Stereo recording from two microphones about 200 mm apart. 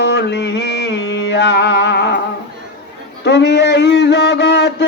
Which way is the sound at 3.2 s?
55° left (ahead or behind).